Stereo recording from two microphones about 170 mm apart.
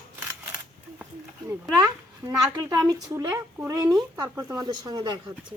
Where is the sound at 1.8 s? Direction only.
20° right (ahead or behind).